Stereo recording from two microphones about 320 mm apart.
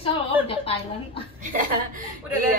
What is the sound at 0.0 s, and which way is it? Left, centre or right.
A woman's voice, centre.